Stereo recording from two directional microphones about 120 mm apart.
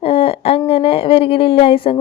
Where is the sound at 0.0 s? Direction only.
55° left (ahead or behind).